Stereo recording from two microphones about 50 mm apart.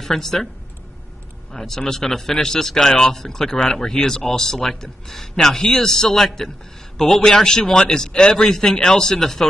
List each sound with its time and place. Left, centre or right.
0.0 s speech: centre
1.5 s speech: centre